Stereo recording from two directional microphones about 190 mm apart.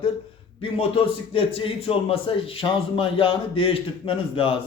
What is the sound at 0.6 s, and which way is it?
A man's voice, 30° left (ahead or behind).